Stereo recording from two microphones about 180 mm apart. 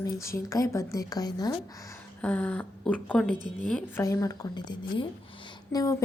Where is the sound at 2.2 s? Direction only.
10° left (ahead or behind).